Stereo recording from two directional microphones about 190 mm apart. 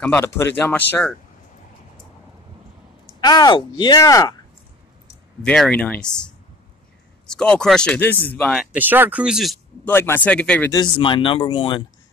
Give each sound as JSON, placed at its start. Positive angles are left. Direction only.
{"t": 0.0, "sound": "speech", "side_deg": 10}
{"t": 3.2, "sound": "speech", "side_deg": 20}
{"t": 5.4, "sound": "speech", "side_deg": 5}
{"t": 8.7, "sound": "speech", "side_deg": -10}
{"t": 9.8, "sound": "speech", "side_deg": 10}
{"t": 10.7, "sound": "speech", "side_deg": 25}